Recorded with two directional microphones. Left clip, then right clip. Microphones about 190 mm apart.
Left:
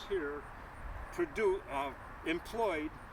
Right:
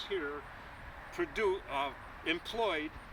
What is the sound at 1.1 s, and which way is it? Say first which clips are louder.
Speech: even; 25° left (ahead or behind).